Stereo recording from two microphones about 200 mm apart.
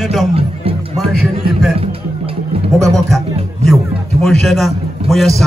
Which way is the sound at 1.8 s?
30° right (ahead or behind).